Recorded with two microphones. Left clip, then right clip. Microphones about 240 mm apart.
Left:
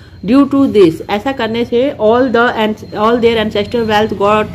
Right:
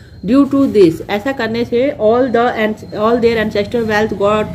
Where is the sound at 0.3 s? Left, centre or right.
Centre.